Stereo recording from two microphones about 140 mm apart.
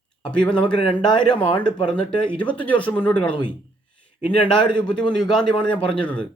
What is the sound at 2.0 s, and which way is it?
Speech, 10° left (ahead or behind).